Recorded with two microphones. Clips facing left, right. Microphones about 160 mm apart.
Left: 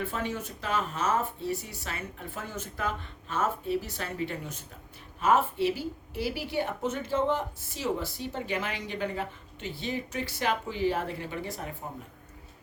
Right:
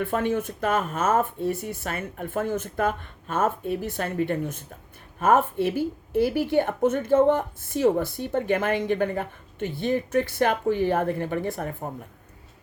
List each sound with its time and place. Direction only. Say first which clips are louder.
0.0 s speech: right 8 dB; 55° right (ahead or behind)